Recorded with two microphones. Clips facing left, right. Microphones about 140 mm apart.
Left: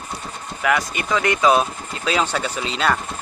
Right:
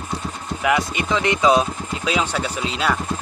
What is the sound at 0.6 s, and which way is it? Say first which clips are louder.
Speech: right 1 dB; 20° right (ahead or behind).